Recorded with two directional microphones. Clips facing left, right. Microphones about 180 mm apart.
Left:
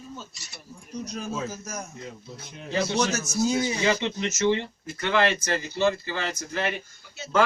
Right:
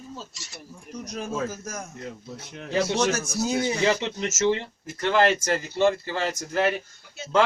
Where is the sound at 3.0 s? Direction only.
55° right (ahead or behind).